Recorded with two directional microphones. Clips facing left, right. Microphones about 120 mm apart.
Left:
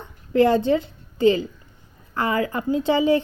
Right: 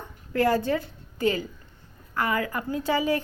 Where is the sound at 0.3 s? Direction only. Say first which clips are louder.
Left 6 dB; 25° left (ahead or behind).